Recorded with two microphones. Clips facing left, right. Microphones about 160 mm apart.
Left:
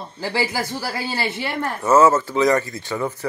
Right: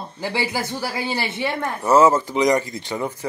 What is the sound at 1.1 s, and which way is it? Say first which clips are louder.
Speech: right 1 dB; 20° right (ahead or behind).